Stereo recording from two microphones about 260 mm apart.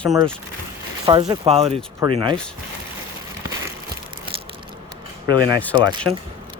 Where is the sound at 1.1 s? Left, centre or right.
Centre.